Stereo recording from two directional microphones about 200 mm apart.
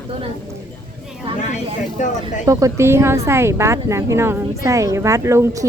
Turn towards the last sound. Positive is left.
turn(degrees=-15)  # may be behind; listen again after turning